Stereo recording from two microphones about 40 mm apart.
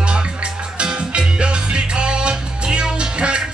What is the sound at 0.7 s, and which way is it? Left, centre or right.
Music, right.